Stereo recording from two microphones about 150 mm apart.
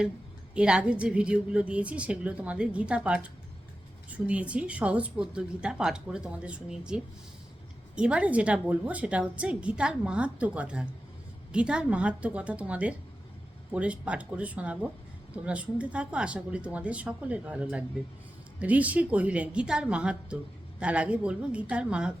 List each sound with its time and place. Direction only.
0.5 s a woman's voice: 5° right (ahead or behind)